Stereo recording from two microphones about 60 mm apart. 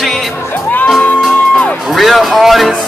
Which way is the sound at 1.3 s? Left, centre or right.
Left.